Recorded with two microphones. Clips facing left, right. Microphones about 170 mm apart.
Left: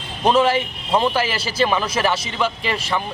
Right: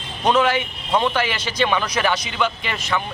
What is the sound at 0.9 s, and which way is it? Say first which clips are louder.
A man's voice: left 1 dB; 5° left (ahead or behind).